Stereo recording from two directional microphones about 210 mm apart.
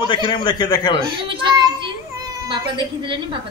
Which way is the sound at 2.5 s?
25° right (ahead or behind).